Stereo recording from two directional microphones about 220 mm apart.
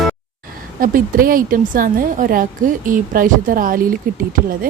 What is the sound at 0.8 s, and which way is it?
A woman's voice, 40° right (ahead or behind).